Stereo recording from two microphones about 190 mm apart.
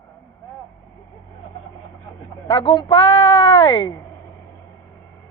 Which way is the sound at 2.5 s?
30° left (ahead or behind).